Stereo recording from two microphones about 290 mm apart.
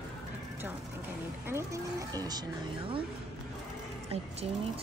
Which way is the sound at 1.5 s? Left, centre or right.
Centre.